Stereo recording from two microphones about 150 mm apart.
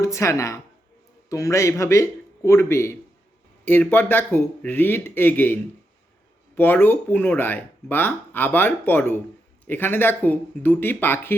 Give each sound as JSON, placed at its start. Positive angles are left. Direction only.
{"t": 0.0, "sound": "a man's voice", "side_deg": 20}
{"t": 6.6, "sound": "speech", "side_deg": 15}